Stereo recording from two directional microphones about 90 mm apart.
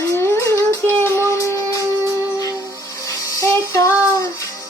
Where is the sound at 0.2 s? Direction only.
30° left (ahead or behind).